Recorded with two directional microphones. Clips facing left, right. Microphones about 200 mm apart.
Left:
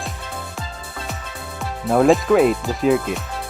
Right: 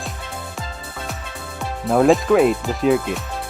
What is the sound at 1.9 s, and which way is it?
Speech, centre (ahead or behind).